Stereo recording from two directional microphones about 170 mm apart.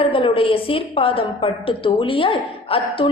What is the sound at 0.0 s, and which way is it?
A woman's voice, 30° left (ahead or behind).